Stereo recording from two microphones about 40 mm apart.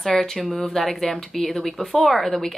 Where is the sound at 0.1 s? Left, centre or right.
Centre.